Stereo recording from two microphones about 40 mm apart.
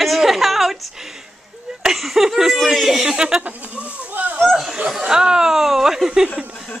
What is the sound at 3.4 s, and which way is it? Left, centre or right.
Speech, right.